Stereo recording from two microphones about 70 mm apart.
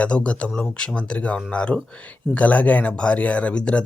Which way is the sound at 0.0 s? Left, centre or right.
Centre.